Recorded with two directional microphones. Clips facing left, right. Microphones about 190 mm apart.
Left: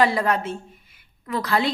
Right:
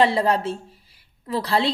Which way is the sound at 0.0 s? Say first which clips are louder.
Right 2 dB; 30° right (ahead or behind).